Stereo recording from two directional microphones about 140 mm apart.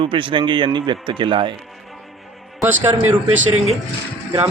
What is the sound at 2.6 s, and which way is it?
Speech, 15° right (ahead or behind).